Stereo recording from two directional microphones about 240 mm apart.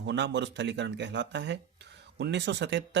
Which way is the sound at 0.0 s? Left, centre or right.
Right.